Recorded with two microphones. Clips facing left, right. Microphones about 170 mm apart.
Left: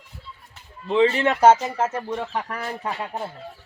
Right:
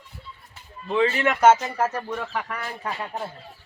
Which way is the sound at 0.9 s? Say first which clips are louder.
Left 3 dB; 25° left (ahead or behind).